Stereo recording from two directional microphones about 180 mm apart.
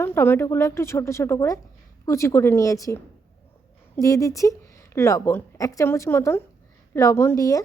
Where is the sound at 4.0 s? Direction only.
20° left (ahead or behind).